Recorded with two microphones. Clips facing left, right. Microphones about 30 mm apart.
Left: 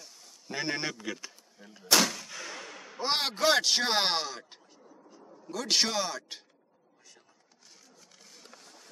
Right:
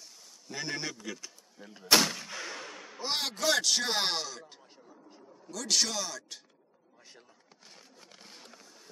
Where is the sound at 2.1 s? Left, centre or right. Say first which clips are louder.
Right 1 dB; centre.